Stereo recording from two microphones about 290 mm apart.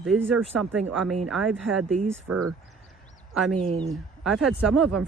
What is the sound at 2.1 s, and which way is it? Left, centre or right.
Speech, right.